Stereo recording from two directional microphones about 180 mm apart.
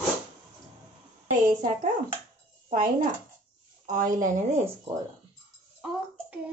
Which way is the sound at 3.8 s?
45° right (ahead or behind).